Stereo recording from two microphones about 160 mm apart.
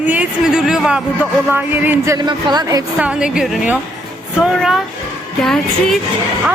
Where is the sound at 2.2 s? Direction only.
25° right (ahead or behind).